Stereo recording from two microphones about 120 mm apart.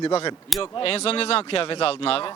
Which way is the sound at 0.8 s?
55° left (ahead or behind).